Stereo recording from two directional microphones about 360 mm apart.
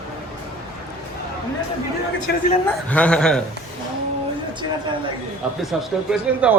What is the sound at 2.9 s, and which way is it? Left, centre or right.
Speech, centre.